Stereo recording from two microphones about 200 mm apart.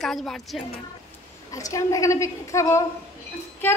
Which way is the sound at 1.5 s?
15° left (ahead or behind).